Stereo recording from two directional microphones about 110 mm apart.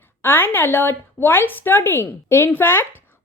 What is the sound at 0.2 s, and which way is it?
A woman's voice, 20° left (ahead or behind).